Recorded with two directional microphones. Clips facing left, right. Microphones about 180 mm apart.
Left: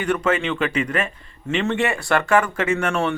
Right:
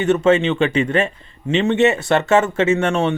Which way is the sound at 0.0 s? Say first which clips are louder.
Right 6 dB; 25° right (ahead or behind).